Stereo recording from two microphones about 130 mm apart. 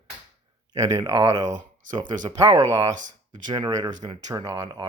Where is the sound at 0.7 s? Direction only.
30° right (ahead or behind).